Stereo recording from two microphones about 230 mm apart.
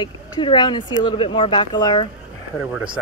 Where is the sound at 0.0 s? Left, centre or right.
Centre.